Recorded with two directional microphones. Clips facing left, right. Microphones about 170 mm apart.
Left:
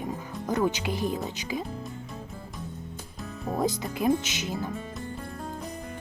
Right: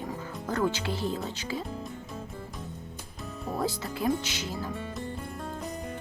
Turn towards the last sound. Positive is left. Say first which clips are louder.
# left 2 dB
turn(degrees=20)  # may be behind; listen again after turning